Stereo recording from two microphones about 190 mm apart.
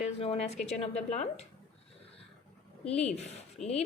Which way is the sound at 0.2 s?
35° left (ahead or behind).